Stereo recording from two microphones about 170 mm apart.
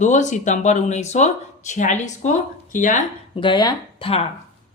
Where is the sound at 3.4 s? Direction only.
25° left (ahead or behind).